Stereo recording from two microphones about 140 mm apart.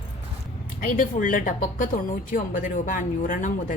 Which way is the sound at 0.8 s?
75° left (ahead or behind).